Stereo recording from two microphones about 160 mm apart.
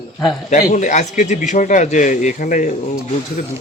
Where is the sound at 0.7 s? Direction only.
50° left (ahead or behind).